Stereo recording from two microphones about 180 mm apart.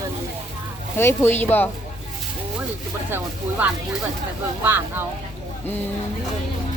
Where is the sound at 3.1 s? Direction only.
10° right (ahead or behind).